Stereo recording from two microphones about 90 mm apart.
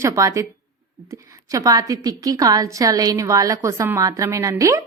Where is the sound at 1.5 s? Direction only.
40° right (ahead or behind).